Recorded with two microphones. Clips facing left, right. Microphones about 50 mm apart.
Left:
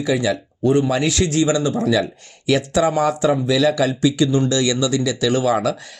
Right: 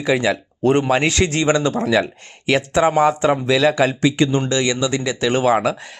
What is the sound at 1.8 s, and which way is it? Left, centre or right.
Speech, right.